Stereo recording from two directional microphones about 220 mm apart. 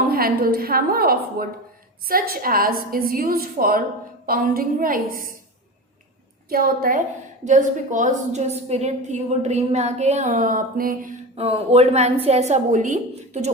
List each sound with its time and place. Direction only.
0.1 s a woman's voice: 45° right (ahead or behind)
6.5 s a woman's voice: 40° right (ahead or behind)